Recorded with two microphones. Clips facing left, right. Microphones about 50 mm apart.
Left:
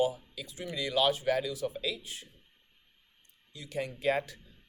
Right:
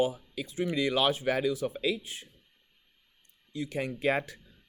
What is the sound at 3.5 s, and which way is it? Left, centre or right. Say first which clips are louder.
Speech: right 4 dB; right.